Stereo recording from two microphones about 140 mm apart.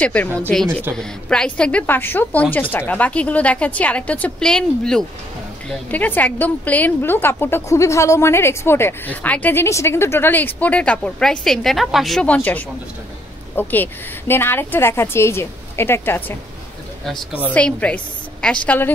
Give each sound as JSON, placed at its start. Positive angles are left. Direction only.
{"t": 0.0, "sound": "a woman's voice", "side_deg": 10}
{"t": 17.6, "sound": "a woman's voice", "side_deg": 10}